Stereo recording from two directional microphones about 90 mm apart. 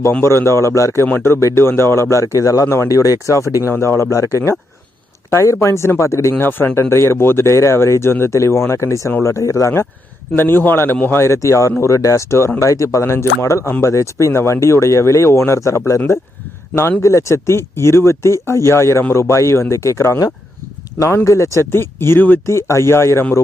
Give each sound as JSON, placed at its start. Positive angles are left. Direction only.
{"t": 0.1, "sound": "speech", "side_deg": 25}
{"t": 1.0, "sound": "speech", "side_deg": 25}